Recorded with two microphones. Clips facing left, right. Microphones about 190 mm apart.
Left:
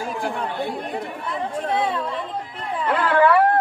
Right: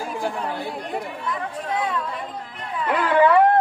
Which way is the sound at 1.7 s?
30° left (ahead or behind).